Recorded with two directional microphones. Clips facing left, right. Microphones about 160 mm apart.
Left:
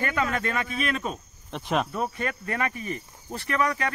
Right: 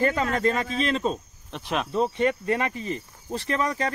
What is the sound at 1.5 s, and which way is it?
Speech, centre (ahead or behind).